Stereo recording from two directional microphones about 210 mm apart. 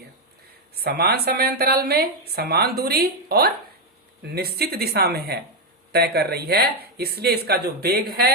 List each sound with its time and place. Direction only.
0.8 s a woman's voice: 50° right (ahead or behind)